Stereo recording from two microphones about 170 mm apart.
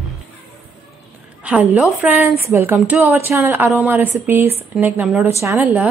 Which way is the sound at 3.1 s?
15° right (ahead or behind).